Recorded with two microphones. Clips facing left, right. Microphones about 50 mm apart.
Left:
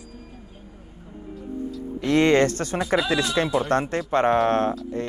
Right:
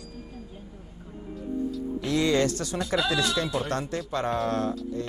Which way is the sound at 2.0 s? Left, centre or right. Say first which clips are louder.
Left 6 dB; left.